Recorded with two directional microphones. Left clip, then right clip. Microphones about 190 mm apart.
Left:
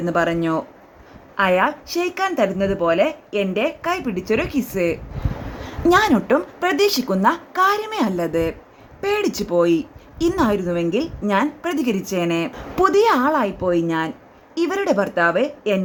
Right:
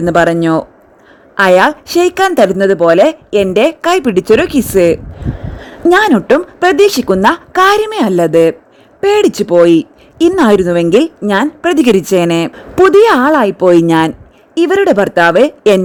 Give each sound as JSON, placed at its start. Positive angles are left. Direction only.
{"t": 0.0, "sound": "speech", "side_deg": -45}
{"t": 5.6, "sound": "a woman's voice", "side_deg": -35}
{"t": 14.5, "sound": "speech", "side_deg": -45}